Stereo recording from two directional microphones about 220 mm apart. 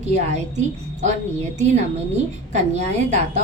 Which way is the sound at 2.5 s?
30° right (ahead or behind).